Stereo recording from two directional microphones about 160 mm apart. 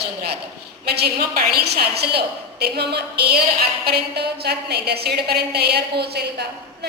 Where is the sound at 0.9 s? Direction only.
85° right.